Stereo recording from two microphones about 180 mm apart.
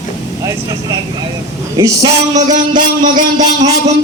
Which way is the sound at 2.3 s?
40° right (ahead or behind).